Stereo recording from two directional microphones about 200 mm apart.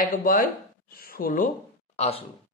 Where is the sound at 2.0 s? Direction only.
30° left (ahead or behind).